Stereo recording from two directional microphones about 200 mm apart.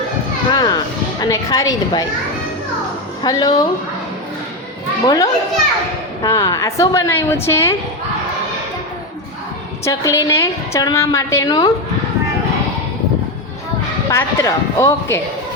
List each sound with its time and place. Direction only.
0.5 s a woman's voice: 20° left (ahead or behind)
3.2 s a woman's voice: 20° left (ahead or behind)
5.0 s a woman's voice: 20° left (ahead or behind)
9.8 s a woman's voice: 15° left (ahead or behind)
14.1 s a woman's voice: 15° left (ahead or behind)